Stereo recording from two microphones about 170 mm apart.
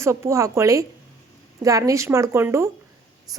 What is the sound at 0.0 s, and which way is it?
A woman's voice, 15° right (ahead or behind).